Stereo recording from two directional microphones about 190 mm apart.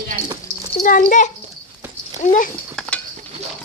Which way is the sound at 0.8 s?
45° left (ahead or behind).